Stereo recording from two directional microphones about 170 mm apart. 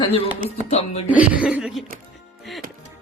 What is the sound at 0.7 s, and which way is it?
Speech, 40° left (ahead or behind).